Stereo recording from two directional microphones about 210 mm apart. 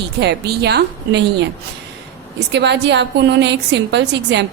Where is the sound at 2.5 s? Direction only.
55° right (ahead or behind).